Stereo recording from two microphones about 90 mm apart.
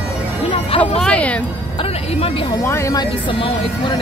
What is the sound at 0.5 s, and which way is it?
Music, 90° left.